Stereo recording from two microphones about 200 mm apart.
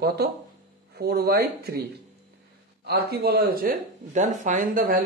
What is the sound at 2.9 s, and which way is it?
Speech, 50° right (ahead or behind).